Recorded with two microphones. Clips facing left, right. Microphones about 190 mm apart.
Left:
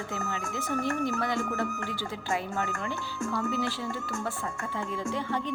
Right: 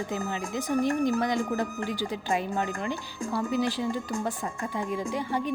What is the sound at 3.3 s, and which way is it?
Speech, 35° right (ahead or behind).